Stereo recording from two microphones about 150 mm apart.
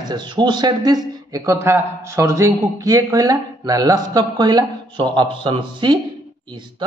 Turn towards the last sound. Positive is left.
turn(degrees=-30)  # may be behind; listen again after turning